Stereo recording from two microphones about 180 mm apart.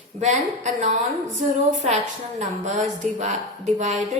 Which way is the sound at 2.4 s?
40° right (ahead or behind).